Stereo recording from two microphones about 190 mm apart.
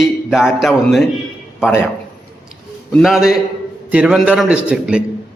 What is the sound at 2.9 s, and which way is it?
A man's voice, centre (ahead or behind).